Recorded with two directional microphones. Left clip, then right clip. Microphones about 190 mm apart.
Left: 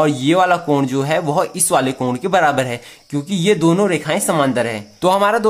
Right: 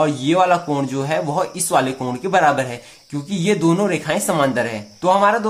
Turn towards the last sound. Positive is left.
turn(degrees=35)  # may be behind; listen again after turning